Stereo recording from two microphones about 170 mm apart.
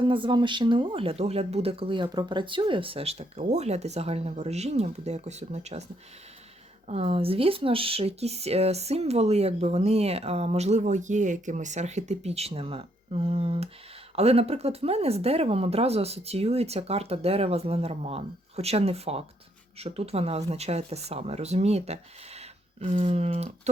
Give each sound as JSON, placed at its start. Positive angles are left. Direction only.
{"t": 0.0, "sound": "speech", "side_deg": -30}
{"t": 6.8, "sound": "speech", "side_deg": -35}